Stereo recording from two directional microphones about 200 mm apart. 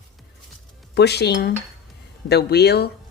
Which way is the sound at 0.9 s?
55° left (ahead or behind).